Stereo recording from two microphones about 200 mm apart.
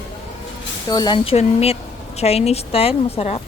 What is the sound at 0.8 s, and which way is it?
Speech, 20° left (ahead or behind).